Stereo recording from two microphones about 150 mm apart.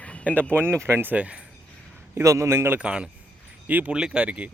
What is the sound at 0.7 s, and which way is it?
Speech, 15° right (ahead or behind).